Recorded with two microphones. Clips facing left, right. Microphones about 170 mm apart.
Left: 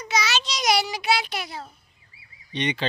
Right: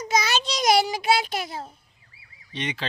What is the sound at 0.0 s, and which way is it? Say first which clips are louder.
Child singing: right 2 dB; 50° right (ahead or behind).